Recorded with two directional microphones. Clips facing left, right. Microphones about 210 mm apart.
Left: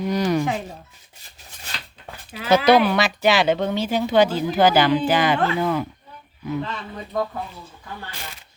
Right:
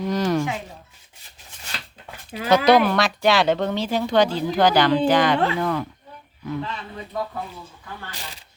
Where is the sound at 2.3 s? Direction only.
35° right (ahead or behind).